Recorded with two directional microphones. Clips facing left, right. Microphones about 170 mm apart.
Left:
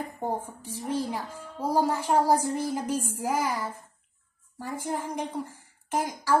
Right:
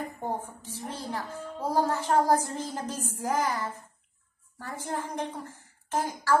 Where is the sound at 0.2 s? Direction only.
10° left (ahead or behind).